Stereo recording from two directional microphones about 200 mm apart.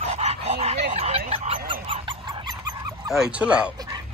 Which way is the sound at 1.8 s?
25° right (ahead or behind).